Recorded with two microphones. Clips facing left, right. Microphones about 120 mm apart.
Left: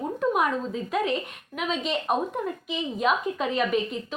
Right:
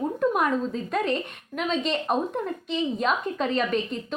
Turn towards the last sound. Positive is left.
turn(degrees=5)  # may be behind; listen again after turning